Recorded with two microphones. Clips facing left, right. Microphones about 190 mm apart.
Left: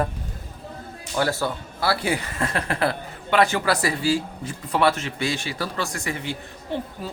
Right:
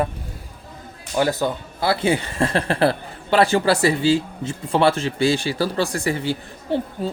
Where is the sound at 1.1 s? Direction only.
15° right (ahead or behind).